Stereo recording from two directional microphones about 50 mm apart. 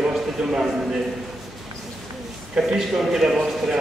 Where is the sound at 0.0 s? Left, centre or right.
Centre.